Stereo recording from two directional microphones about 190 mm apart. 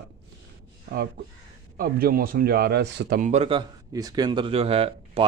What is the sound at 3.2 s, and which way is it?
Speech, 35° right (ahead or behind).